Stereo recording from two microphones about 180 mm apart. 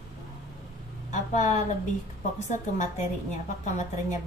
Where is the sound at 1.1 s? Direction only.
40° left (ahead or behind).